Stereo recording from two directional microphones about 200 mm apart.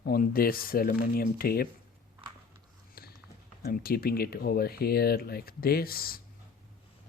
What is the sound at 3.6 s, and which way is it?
Speech, 50° left (ahead or behind).